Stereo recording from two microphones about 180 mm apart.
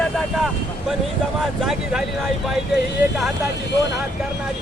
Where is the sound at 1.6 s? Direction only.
5° right (ahead or behind).